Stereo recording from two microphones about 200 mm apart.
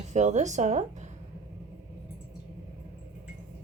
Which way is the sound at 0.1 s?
35° right (ahead or behind).